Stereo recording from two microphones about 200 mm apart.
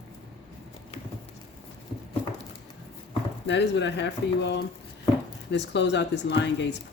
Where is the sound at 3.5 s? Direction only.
60° left (ahead or behind).